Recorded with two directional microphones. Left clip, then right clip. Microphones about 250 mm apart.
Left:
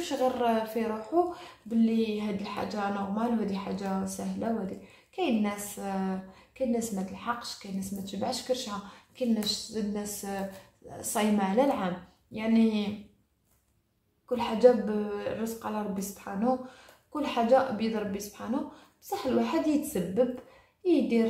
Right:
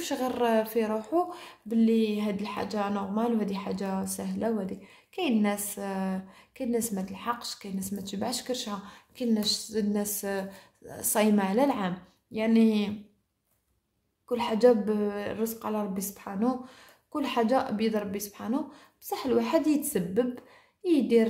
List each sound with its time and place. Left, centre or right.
0.0 s a woman's voice: right
14.3 s a woman's voice: right